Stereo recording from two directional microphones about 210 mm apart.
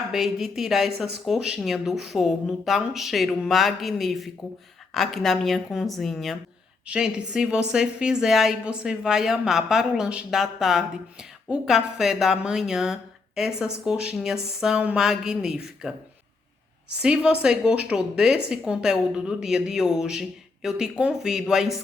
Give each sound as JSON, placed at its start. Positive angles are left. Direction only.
{"t": 0.1, "sound": "a woman's voice", "side_deg": 0}
{"t": 17.0, "sound": "a woman's voice", "side_deg": -5}